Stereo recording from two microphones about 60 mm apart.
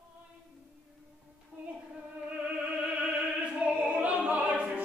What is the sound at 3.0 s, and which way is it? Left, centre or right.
Opera, centre.